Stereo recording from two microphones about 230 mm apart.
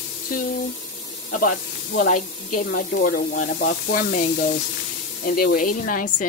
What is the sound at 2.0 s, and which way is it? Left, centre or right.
Speech, left.